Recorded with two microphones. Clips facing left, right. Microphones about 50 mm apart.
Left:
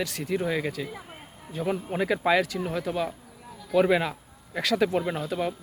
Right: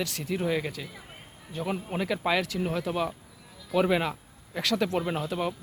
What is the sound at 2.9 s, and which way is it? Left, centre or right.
Speech, centre.